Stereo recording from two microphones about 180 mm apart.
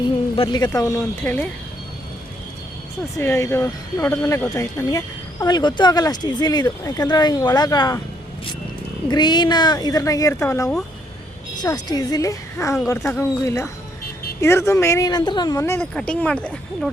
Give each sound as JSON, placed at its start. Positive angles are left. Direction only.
{"t": 0.3, "sound": "speech", "side_deg": 25}
{"t": 3.2, "sound": "speech", "side_deg": 15}
{"t": 9.0, "sound": "speech", "side_deg": 25}